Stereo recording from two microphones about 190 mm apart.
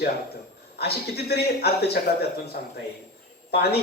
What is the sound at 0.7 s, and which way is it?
A man's voice, 55° left (ahead or behind).